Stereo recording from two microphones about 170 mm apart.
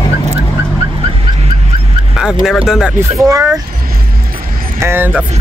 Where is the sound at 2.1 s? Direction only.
5° right (ahead or behind).